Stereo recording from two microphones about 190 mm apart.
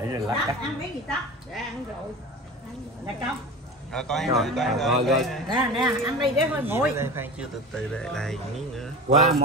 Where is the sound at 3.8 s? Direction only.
Centre (ahead or behind).